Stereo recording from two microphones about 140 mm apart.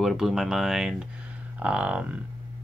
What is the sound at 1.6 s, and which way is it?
Music, 10° right (ahead or behind).